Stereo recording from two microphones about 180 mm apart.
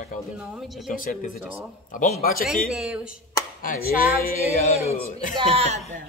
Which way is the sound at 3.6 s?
55° left (ahead or behind).